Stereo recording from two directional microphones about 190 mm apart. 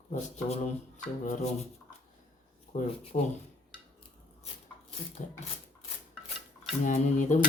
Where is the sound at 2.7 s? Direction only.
35° left (ahead or behind).